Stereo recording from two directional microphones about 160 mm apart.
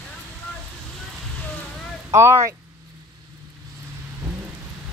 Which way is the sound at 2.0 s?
15° right (ahead or behind).